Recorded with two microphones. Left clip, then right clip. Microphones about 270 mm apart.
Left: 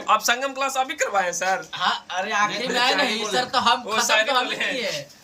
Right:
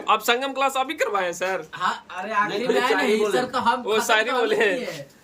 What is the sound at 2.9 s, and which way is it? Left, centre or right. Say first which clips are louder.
Speech: right 2 dB; right.